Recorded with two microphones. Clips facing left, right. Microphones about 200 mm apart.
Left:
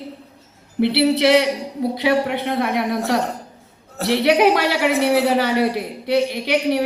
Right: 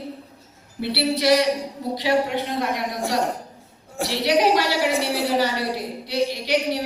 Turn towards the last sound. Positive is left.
turn(degrees=60)  # may be behind; listen again after turning